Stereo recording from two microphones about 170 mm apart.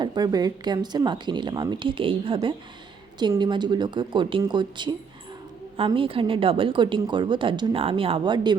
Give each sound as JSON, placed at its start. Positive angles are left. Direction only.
{"t": 0.0, "sound": "a woman's voice", "side_deg": -25}